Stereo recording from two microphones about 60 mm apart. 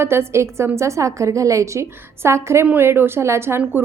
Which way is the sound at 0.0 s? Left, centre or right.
Right.